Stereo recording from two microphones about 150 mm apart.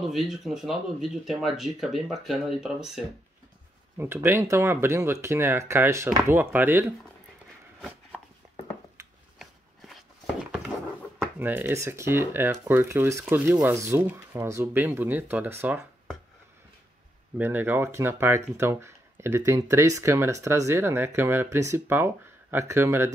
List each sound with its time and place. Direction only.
0.0 s speech: centre (ahead or behind)
4.0 s speech: 15° right (ahead or behind)
9.4 s a sound: centre (ahead or behind)
11.1 s speech: 10° right (ahead or behind)
17.4 s speech: 15° right (ahead or behind)